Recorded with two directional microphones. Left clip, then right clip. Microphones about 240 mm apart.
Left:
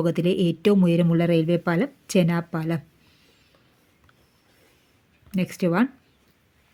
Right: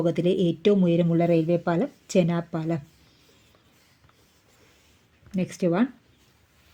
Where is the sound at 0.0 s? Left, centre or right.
Centre.